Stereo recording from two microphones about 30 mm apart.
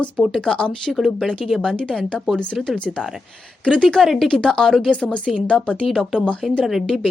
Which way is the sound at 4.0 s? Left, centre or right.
Centre.